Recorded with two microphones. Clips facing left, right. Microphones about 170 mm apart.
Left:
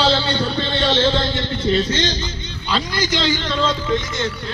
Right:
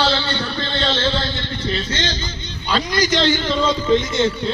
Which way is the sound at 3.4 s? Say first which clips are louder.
Right 2 dB; 5° right (ahead or behind).